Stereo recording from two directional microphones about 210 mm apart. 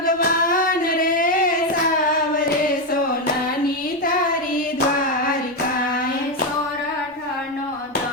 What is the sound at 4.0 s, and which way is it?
Child singing, 40° left (ahead or behind).